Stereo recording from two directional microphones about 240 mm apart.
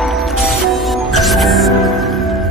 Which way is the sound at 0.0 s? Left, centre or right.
Centre.